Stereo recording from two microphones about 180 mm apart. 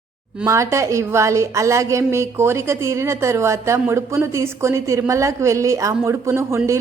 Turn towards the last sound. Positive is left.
turn(degrees=-15)  # may be behind; listen again after turning